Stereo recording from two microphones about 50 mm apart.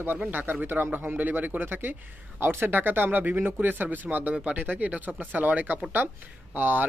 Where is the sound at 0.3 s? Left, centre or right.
Right.